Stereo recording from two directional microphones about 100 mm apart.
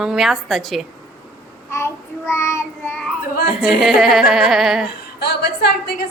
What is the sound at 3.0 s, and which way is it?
A woman's voice, centre (ahead or behind).